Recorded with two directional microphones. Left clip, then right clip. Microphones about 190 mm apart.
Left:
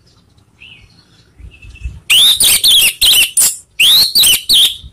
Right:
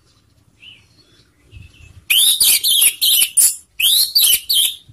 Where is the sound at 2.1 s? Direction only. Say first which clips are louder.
Left 6 dB; 10° left (ahead or behind).